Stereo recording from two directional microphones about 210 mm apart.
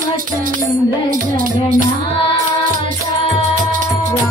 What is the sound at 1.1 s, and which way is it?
Music, 40° right (ahead or behind).